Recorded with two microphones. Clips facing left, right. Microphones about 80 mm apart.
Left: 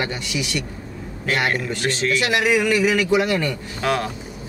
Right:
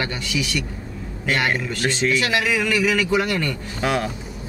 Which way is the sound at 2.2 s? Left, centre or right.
Centre.